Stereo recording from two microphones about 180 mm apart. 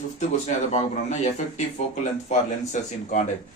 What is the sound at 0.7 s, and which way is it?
A man's voice, 40° left (ahead or behind).